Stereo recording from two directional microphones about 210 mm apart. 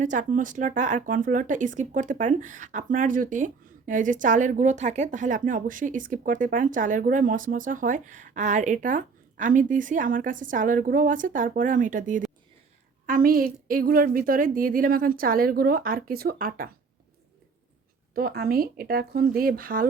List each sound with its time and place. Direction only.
0.0 s a woman's voice: 40° right (ahead or behind)
18.1 s a woman's voice: 45° right (ahead or behind)